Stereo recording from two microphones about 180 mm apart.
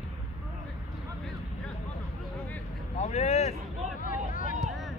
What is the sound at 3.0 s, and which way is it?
Speech, 35° left (ahead or behind).